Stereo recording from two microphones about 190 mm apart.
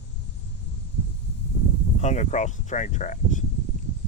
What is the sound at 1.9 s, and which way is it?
Speech, 40° left (ahead or behind).